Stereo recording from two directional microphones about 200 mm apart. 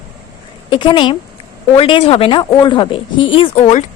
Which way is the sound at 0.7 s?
25° left (ahead or behind).